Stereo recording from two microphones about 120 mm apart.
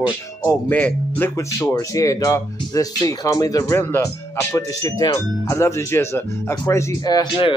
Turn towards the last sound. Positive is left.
turn(degrees=40)  # may be behind; listen again after turning